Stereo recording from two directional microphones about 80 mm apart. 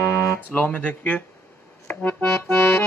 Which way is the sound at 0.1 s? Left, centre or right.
Left.